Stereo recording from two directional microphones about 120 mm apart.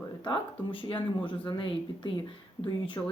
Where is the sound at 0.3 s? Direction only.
45° left (ahead or behind).